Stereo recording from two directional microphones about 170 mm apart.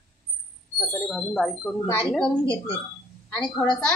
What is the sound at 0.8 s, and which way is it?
A woman's voice, centre (ahead or behind).